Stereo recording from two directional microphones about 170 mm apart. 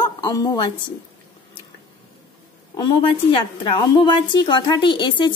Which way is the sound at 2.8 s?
30° left (ahead or behind).